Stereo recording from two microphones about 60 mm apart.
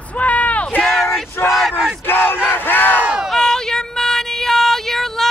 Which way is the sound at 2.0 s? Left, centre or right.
Left.